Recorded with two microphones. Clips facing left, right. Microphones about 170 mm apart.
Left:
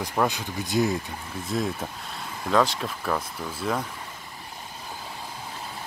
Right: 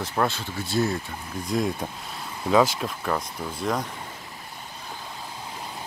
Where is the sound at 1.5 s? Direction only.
5° left (ahead or behind).